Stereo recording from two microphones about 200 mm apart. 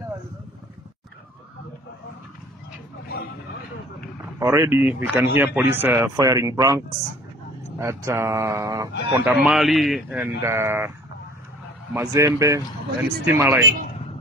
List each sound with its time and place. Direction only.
4.4 s speech: 15° right (ahead or behind)
7.8 s speech: 15° right (ahead or behind)
9.1 s speech: 10° right (ahead or behind)
11.9 s speech: 15° right (ahead or behind)